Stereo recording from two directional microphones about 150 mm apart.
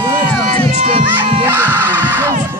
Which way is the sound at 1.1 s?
15° right (ahead or behind).